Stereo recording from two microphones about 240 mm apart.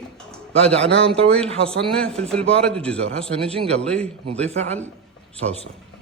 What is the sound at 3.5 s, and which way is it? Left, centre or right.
Speech, right.